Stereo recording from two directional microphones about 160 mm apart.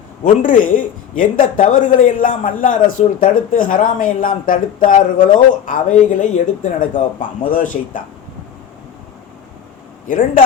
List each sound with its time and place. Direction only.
0.4 s a man's voice: 55° left (ahead or behind)
10.1 s a man's voice: 60° left (ahead or behind)